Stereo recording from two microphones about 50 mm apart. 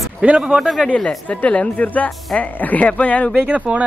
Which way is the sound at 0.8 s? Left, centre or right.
Left.